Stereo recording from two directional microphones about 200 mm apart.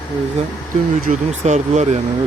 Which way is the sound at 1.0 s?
35° right (ahead or behind).